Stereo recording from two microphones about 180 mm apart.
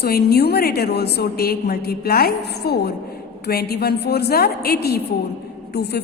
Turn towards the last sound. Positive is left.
turn(degrees=65)  # may be behind; listen again after turning